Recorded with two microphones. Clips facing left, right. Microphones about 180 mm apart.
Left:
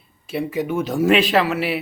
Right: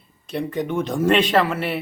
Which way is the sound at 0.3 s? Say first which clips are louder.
Left 2 dB; 5° left (ahead or behind).